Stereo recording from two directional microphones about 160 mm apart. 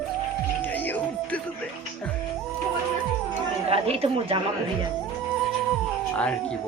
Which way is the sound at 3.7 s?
40° right (ahead or behind).